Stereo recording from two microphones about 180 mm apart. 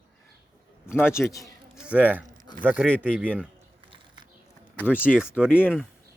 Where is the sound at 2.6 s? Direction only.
10° right (ahead or behind).